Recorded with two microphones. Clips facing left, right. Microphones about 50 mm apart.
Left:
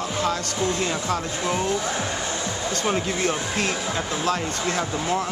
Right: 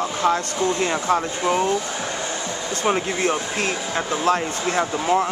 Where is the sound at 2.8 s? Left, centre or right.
Centre.